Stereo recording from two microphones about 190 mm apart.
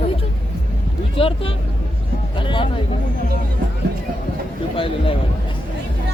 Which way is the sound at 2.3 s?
25° left (ahead or behind).